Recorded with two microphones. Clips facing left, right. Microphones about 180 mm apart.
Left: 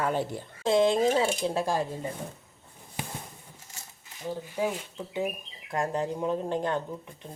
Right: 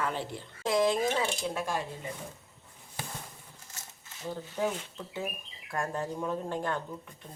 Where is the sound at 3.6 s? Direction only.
15° left (ahead or behind).